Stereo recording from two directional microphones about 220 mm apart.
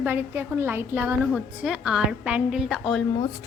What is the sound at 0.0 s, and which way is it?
A woman's voice, 10° right (ahead or behind).